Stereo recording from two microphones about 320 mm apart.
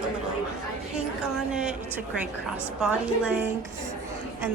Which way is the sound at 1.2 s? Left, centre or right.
Centre.